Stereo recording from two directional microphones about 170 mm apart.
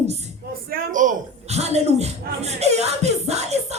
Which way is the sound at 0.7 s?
50° right (ahead or behind).